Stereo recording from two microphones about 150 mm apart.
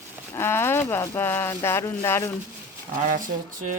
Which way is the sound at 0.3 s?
15° left (ahead or behind).